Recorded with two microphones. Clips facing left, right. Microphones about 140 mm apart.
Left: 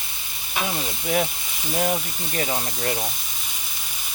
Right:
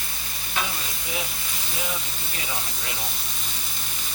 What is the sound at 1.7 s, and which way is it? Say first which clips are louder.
Speech: left 9 dB; 55° left (ahead or behind).